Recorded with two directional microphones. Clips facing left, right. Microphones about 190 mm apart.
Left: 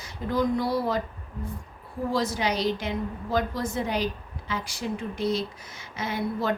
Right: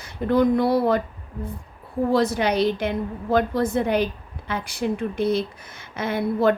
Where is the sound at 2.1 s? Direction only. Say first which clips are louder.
Right 6 dB; 60° right (ahead or behind).